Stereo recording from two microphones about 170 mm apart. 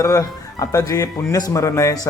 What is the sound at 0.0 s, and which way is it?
Speech, 20° left (ahead or behind).